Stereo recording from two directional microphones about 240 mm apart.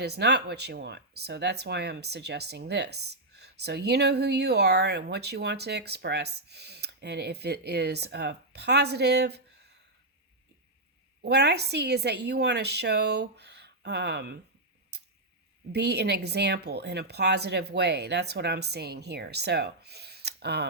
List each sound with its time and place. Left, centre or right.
0.0 s speech: right
11.2 s speech: right
15.7 s speech: right